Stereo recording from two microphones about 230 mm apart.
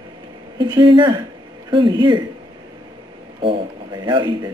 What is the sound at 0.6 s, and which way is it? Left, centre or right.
A man's voice, centre.